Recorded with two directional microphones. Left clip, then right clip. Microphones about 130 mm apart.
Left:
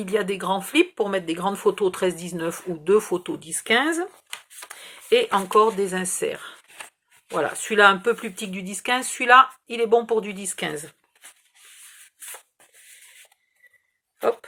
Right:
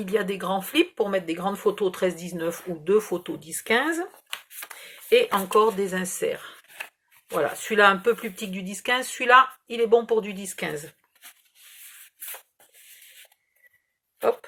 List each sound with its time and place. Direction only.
0.0 s speech: 40° left (ahead or behind)
6.7 s a sound: 15° left (ahead or behind)
7.4 s speech: 40° left (ahead or behind)